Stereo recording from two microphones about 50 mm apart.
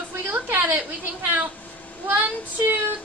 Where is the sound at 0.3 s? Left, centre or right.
Right.